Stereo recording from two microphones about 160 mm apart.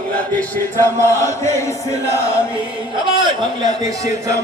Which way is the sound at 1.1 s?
20° left (ahead or behind).